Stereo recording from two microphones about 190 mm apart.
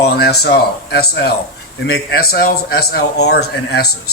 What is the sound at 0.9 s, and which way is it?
Speech, 60° left (ahead or behind).